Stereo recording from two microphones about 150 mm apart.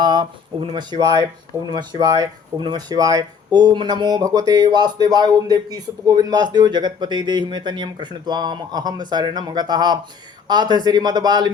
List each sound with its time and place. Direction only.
0.0 s speech: 30° right (ahead or behind)